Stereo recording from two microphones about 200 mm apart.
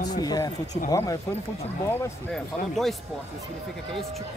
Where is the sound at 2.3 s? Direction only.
Centre (ahead or behind).